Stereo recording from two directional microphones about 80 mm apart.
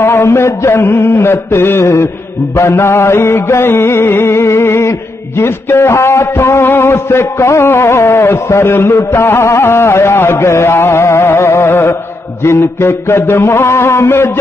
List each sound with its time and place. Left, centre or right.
0.0 s a man's voice: left